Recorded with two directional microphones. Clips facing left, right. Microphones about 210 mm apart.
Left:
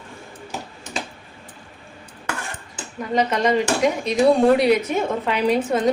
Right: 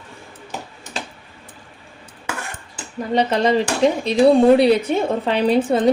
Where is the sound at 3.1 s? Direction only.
30° right (ahead or behind).